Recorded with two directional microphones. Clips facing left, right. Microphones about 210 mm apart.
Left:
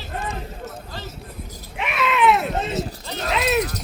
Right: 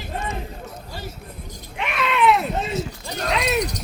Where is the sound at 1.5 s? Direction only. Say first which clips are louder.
Even; 5° left (ahead or behind).